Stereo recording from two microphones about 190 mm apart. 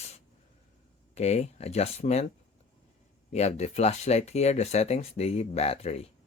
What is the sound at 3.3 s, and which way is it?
Speech, 35° left (ahead or behind).